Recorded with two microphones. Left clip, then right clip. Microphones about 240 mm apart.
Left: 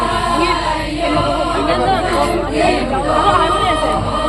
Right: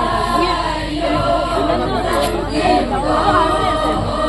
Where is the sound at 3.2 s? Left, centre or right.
Left.